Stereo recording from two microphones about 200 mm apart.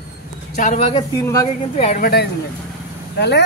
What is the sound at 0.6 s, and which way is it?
Speech, 40° left (ahead or behind).